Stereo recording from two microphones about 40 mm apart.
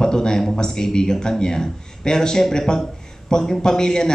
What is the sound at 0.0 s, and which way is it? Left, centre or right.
A man's voice, centre.